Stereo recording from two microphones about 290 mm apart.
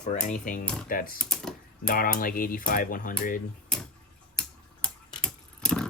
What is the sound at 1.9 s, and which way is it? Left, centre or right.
Speech, left.